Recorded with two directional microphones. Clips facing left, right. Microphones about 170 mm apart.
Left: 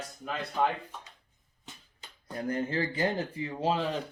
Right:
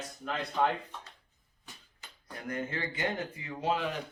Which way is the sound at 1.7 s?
20° left (ahead or behind).